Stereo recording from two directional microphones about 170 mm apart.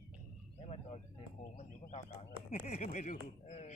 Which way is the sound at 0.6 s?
40° left (ahead or behind).